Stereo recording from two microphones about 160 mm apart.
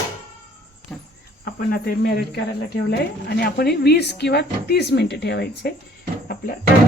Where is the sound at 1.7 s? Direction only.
80° left.